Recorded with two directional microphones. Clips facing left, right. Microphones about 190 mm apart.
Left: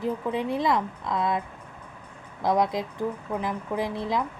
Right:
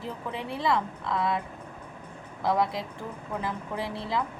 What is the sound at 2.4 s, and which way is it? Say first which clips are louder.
A woman's voice: left 3 dB; 20° left (ahead or behind).